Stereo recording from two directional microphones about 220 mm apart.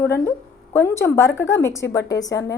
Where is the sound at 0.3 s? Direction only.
10° left (ahead or behind).